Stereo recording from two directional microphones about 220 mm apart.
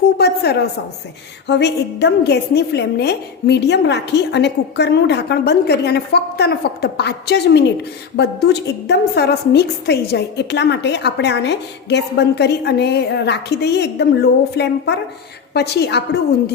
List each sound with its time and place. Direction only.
1.5 s a woman's voice: 50° left (ahead or behind)